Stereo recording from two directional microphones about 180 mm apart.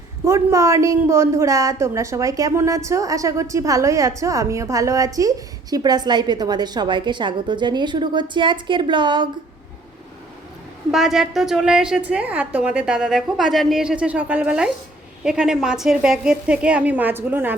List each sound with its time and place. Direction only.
0.3 s a woman's voice: 15° right (ahead or behind)
10.9 s a woman's voice: centre (ahead or behind)